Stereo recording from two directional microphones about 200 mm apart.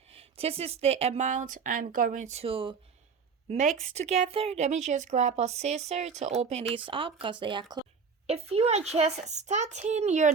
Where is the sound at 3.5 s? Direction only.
35° right (ahead or behind).